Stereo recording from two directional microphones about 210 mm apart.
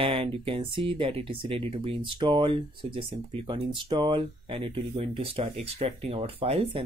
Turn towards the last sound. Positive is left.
turn(degrees=-25)  # may be behind; listen again after turning